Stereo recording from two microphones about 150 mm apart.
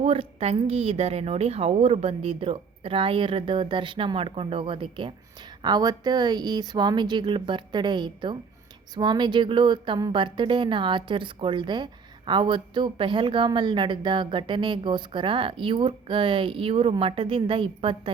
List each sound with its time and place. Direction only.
0.0 s speech: 40° right (ahead or behind)